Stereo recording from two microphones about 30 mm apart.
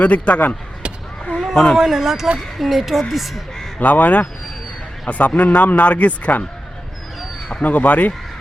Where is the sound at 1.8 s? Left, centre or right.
Centre.